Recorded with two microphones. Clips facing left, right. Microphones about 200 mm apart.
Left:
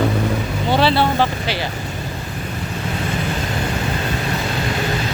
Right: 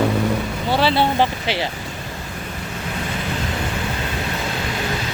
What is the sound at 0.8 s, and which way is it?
Speech, 15° right (ahead or behind).